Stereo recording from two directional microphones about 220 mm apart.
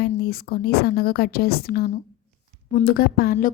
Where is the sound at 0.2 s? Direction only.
45° left (ahead or behind).